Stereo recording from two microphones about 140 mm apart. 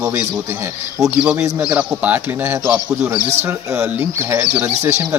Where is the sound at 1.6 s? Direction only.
10° right (ahead or behind).